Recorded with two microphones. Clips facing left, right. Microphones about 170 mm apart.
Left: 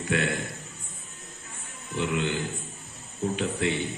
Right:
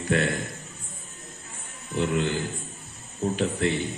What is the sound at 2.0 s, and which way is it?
A man's voice, 40° right (ahead or behind).